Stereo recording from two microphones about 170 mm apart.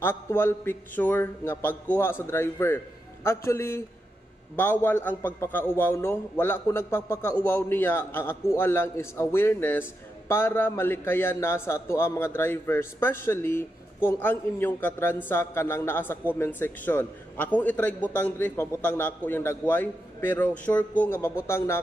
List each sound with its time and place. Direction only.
0.0 s a man's voice: 10° left (ahead or behind)